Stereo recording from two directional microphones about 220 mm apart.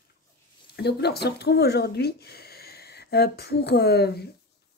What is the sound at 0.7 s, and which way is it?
Speech, 50° left (ahead or behind).